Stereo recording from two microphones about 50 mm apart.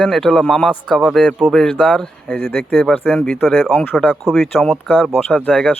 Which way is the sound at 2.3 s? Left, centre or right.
Left.